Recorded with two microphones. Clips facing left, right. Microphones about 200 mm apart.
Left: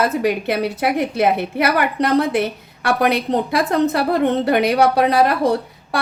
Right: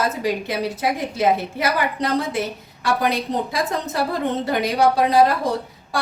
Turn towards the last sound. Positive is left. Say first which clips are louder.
# left 1 dB
turn(degrees=65)  # may be behind; listen again after turning